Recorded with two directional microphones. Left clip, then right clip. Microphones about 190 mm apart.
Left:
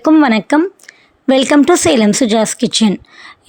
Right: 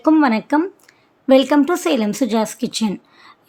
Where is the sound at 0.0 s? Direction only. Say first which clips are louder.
Left 5 dB; 25° left (ahead or behind).